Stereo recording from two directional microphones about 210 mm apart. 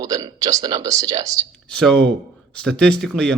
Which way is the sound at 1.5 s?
5° left (ahead or behind).